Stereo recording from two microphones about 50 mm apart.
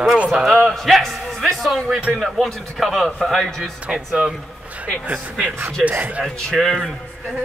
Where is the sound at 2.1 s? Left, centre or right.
Centre.